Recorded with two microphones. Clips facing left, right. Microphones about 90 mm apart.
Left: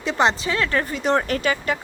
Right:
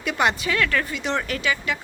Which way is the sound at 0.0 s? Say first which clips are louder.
Left 2 dB; 30° left (ahead or behind).